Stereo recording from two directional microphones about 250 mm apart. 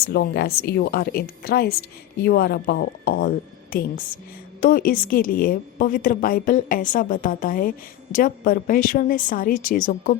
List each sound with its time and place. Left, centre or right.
0.0 s a woman's voice: left